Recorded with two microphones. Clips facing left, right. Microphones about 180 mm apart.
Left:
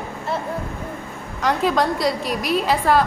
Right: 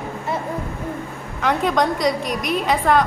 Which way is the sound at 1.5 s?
5° left (ahead or behind).